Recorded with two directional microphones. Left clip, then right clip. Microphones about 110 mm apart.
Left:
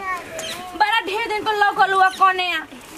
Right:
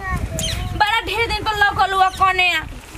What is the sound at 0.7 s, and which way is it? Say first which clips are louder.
A woman's voice: right 1 dB; 10° right (ahead or behind).